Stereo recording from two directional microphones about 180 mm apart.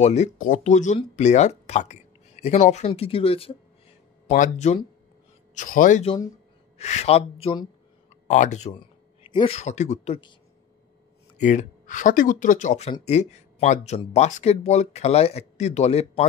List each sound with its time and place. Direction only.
0.0 s speech: 40° left (ahead or behind)
8.3 s speech: 40° left (ahead or behind)
9.6 s speech: 40° left (ahead or behind)
11.3 s speech: 45° left (ahead or behind)